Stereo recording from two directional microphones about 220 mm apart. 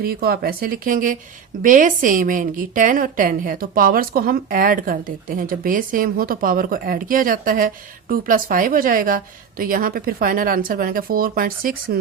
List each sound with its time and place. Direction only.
0.0 s a woman's voice: 45° right (ahead or behind)